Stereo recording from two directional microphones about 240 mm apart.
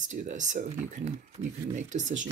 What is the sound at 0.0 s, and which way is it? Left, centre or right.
Speech, right.